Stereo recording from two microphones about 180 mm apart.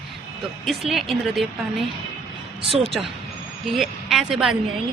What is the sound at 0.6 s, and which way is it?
Speech, centre (ahead or behind).